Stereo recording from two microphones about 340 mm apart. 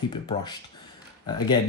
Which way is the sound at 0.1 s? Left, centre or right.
Centre.